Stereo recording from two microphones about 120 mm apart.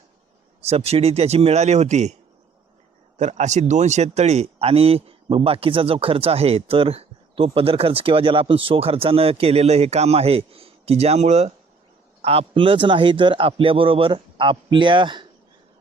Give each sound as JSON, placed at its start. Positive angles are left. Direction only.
{"t": 0.6, "sound": "speech", "side_deg": -60}
{"t": 3.2, "sound": "speech", "side_deg": -75}